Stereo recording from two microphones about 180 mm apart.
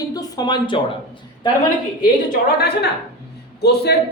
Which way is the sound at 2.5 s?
65° left (ahead or behind).